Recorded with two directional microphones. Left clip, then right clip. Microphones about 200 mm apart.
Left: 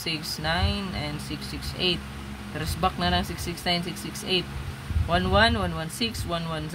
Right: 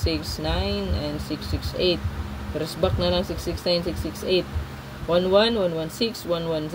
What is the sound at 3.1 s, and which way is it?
Speech, 75° left (ahead or behind).